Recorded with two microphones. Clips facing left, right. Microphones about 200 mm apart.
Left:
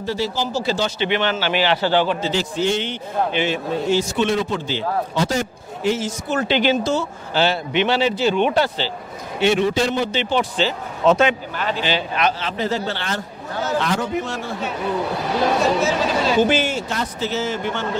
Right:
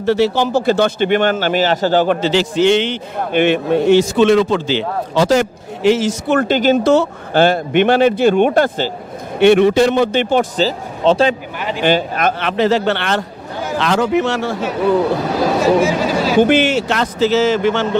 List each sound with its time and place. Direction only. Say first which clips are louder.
0.0 s a man's voice: right 9 dB; 65° right (ahead or behind); by 2.1 s 45° right (ahead or behind)
2.2 s a man's voice: right 8 dB; 80° right
3.3 s speech: right 12 dB; 55° right (ahead or behind)
9.4 s speech: right 8 dB; 60° right (ahead or behind)
10.6 s speech: right 3 dB; 35° right (ahead or behind)
11.8 s speech: right 8 dB; 50° right (ahead or behind); by 13.2 s 70° right (ahead or behind)
13.7 s a man's voice: right 8 dB; 90° right
15.8 s speech: right 4 dB; 10° right (ahead or behind)
16.3 s a man's voice: right 9 dB; 60° right (ahead or behind); by 17.8 s 90° right